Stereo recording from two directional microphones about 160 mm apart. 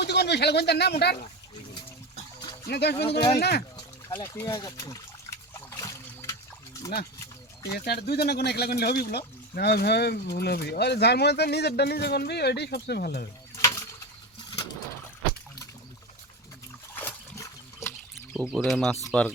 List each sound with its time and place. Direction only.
0.0 s speech: 90° left
2.6 s speech: 90° left
2.9 s speech: 40° left (ahead or behind)
3.3 s speech: 90° left
4.1 s water: 15° left (ahead or behind)
7.9 s speech: 85° left
13.6 s a sound: 20° left (ahead or behind)
16.9 s a sound: 10° left (ahead or behind)
18.3 s speech: centre (ahead or behind)